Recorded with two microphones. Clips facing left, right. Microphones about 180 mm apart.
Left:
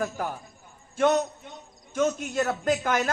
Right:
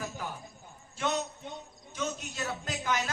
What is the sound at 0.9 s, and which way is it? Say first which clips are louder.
A man's voice: left 10 dB; 50° left (ahead or behind).